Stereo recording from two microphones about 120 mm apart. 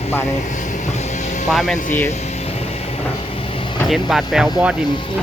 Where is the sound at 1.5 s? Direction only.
Centre (ahead or behind).